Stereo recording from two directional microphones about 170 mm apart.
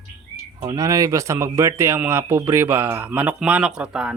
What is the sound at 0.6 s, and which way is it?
Speech, 20° right (ahead or behind).